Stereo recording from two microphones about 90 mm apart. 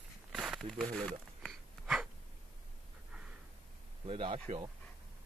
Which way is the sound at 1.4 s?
Centre (ahead or behind).